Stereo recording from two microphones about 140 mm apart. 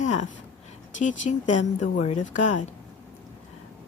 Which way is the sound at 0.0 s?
60° left (ahead or behind).